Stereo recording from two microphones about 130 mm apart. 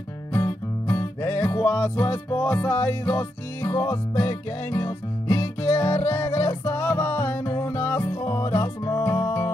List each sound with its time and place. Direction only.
0.3 s music: 25° left (ahead or behind)